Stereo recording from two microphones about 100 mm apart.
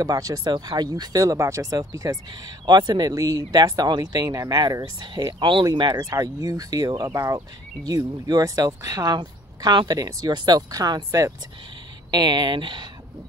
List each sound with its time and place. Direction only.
0.0 s speech: 40° right (ahead or behind)
7.1 s speech: 30° right (ahead or behind); by 12.8 s 50° right (ahead or behind)